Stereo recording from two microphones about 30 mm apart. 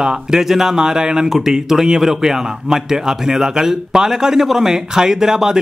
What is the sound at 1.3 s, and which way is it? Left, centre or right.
Speech, centre.